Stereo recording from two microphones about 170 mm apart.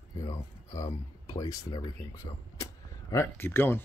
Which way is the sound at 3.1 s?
15° left (ahead or behind).